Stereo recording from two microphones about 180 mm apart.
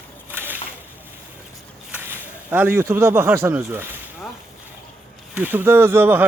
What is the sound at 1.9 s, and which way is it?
Speech, 10° right (ahead or behind).